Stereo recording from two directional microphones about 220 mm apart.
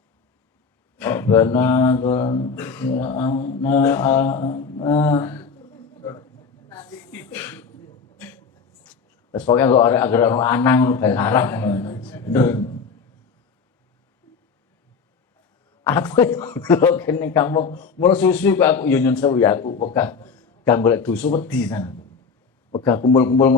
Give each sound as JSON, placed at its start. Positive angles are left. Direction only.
{"t": 0.9, "sound": "a man's voice", "side_deg": 10}
{"t": 2.6, "sound": "a man's voice", "side_deg": 5}
{"t": 4.9, "sound": "a sound", "side_deg": 10}
{"t": 9.8, "sound": "a man's voice", "side_deg": 10}
{"t": 15.8, "sound": "a man's voice", "side_deg": 10}